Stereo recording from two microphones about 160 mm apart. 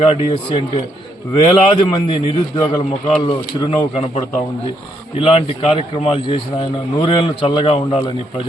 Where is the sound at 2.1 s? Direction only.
35° left (ahead or behind).